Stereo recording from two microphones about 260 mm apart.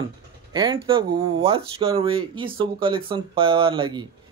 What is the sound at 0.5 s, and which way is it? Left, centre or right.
Speech, centre.